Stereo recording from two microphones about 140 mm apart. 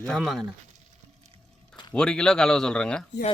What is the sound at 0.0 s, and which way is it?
Speech, centre (ahead or behind).